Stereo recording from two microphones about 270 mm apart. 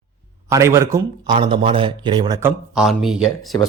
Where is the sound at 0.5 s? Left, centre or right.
Centre.